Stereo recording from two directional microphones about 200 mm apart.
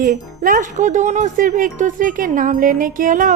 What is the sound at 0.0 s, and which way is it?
Speech, 45° right (ahead or behind).